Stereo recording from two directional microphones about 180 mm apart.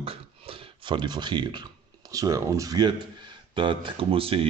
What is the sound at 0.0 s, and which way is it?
A man's voice, 30° right (ahead or behind).